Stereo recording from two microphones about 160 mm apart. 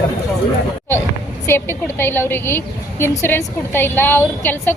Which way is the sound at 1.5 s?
15° left (ahead or behind).